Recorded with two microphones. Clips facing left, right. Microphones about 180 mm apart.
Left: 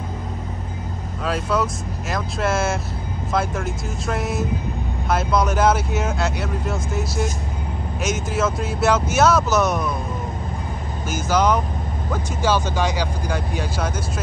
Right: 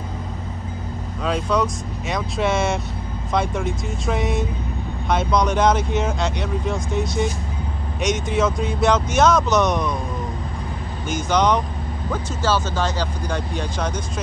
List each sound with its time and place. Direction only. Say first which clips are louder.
1.2 s speech: right 1 dB; 5° left (ahead or behind)
11.1 s speech: even; 5° left (ahead or behind)